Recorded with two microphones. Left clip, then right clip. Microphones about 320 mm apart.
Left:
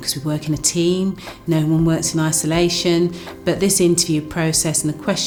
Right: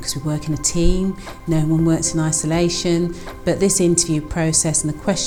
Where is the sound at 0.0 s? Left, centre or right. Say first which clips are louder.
Left 2 dB; right.